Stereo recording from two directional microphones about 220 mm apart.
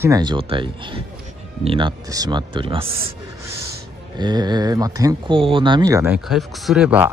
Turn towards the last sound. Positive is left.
turn(degrees=-5)  # may be behind; listen again after turning